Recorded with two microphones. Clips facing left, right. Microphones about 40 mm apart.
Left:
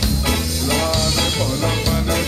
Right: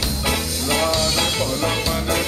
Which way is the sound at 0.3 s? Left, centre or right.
Centre.